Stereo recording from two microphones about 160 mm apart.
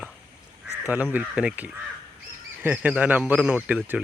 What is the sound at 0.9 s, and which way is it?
Speech, 10° right (ahead or behind).